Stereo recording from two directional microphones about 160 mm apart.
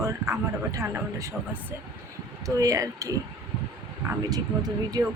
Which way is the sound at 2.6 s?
20° right (ahead or behind).